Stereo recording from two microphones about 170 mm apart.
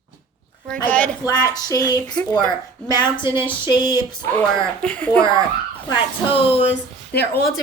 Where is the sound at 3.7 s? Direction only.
25° left (ahead or behind).